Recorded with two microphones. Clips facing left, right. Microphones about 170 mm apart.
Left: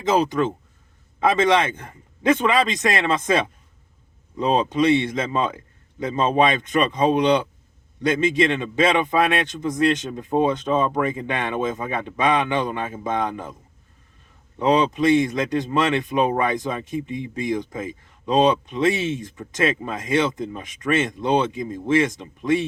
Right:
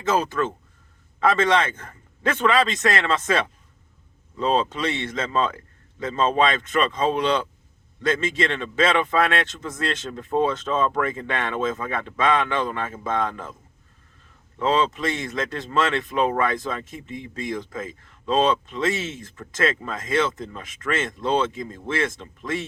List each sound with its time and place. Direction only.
0.1 s speech: 15° left (ahead or behind)
14.6 s speech: 15° left (ahead or behind)